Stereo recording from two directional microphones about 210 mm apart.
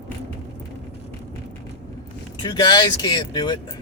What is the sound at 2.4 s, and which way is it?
Speech, 20° left (ahead or behind).